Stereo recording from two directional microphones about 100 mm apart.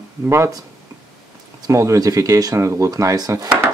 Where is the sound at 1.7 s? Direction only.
30° right (ahead or behind).